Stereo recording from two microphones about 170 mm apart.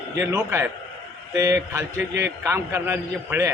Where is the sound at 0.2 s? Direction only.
15° right (ahead or behind).